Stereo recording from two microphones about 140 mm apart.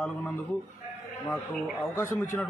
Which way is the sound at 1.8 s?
20° left (ahead or behind).